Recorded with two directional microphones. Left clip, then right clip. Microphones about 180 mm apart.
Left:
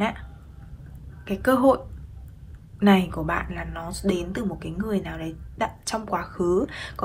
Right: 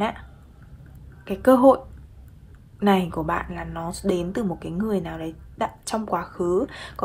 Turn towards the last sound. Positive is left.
turn(degrees=-10)  # may be behind; listen again after turning